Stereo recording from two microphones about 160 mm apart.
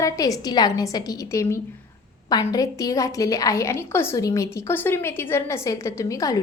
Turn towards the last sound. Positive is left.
turn(degrees=20)  # may be behind; listen again after turning